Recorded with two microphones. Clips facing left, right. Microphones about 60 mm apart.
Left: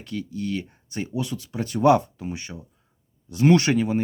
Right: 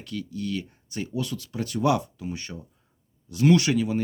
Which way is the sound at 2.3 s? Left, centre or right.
Centre.